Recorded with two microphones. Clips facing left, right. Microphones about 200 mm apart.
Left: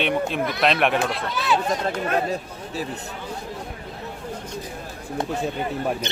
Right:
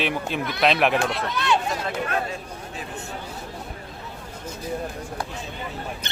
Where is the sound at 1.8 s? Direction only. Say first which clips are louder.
Left 4 dB; 40° left (ahead or behind).